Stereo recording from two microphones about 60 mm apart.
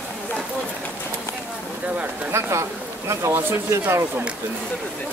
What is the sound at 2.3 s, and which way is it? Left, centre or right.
Speech, right.